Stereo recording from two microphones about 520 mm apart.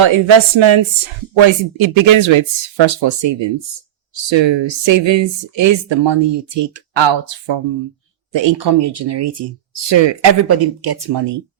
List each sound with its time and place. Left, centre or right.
0.0 s speech: right